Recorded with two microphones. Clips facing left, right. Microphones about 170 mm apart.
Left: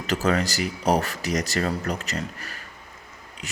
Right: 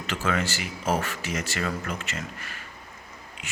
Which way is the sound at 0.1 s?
40° left (ahead or behind).